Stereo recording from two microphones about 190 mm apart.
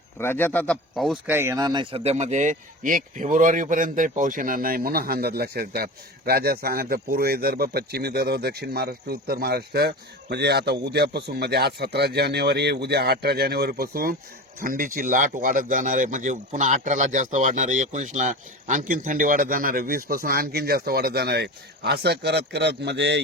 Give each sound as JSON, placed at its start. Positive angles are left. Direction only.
{"t": 0.2, "sound": "speech", "side_deg": 10}
{"t": 1.3, "sound": "speech", "side_deg": -15}